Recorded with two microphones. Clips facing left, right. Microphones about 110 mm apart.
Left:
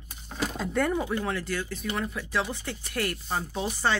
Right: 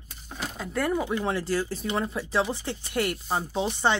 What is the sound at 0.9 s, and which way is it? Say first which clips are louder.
Speech: right 2 dB; 15° right (ahead or behind).